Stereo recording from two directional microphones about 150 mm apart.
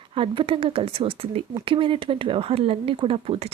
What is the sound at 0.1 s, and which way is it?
Speech, 35° right (ahead or behind).